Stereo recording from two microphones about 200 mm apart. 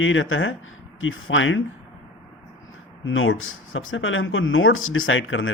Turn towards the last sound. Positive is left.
turn(degrees=80)